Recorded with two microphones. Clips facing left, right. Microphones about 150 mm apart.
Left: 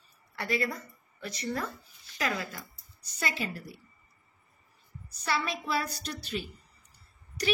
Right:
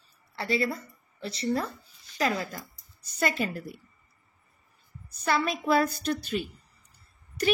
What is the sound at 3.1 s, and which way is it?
Speech, 50° right (ahead or behind).